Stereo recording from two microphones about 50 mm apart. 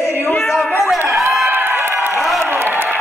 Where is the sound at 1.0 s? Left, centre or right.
Right.